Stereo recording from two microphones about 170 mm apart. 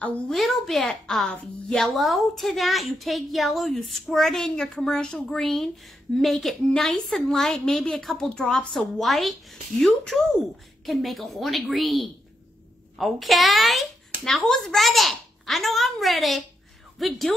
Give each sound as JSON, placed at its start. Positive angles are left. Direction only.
{"t": 0.0, "sound": "a woman's voice", "side_deg": 5}